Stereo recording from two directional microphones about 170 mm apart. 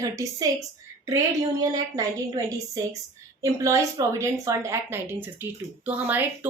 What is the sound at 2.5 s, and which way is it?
A woman's voice, 20° right (ahead or behind).